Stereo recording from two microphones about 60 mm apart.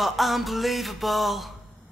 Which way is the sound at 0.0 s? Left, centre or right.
Centre.